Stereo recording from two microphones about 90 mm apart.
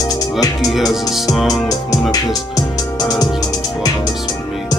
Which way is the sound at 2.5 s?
45° left (ahead or behind).